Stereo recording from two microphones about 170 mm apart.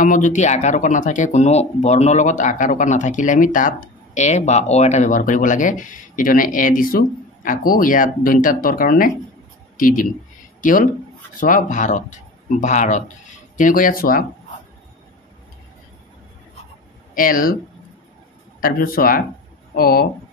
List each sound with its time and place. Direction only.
0.0 s speech: 50° left (ahead or behind)
17.1 s speech: 55° left (ahead or behind)
18.6 s speech: 60° left (ahead or behind)